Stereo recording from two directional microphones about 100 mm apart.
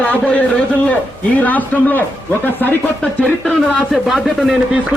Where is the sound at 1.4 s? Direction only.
20° left (ahead or behind).